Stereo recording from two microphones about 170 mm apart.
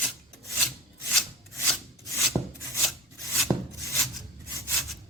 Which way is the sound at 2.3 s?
Centre (ahead or behind).